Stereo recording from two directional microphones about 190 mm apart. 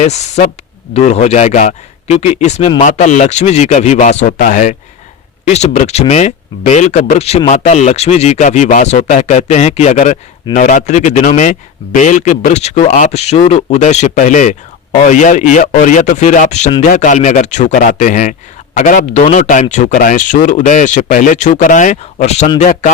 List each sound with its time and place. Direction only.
0.0 s speech: 35° left (ahead or behind)